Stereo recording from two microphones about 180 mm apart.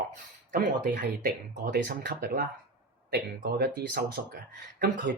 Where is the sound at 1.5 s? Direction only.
60° right (ahead or behind).